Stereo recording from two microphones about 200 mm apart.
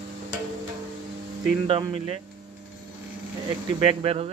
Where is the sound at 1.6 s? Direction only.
25° right (ahead or behind).